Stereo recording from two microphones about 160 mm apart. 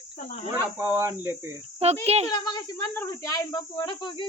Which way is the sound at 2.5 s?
20° left (ahead or behind).